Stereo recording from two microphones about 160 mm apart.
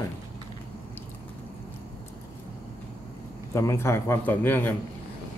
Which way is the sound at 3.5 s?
15° left (ahead or behind).